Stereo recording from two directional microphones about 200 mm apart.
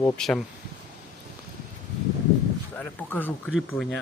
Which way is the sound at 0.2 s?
Centre (ahead or behind).